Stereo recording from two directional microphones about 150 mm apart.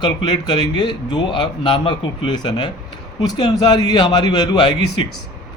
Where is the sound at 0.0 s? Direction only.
30° left (ahead or behind).